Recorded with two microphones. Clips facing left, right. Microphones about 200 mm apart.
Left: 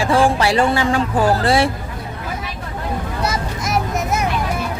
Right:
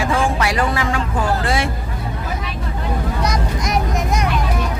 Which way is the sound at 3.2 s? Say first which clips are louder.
Right 1 dB; 5° left (ahead or behind).